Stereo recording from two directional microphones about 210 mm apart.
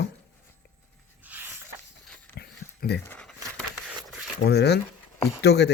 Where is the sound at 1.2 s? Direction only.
10° right (ahead or behind).